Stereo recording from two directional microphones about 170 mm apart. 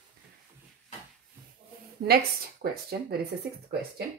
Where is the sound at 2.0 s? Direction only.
65° right (ahead or behind).